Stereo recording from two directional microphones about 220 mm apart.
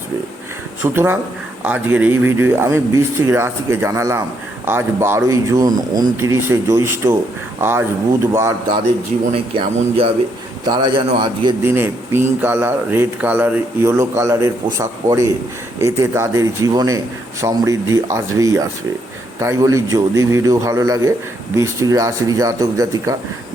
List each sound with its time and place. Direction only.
0.8 s speech: 10° right (ahead or behind)
9.6 s a man's voice: 25° right (ahead or behind)
11.6 s speech: 10° right (ahead or behind)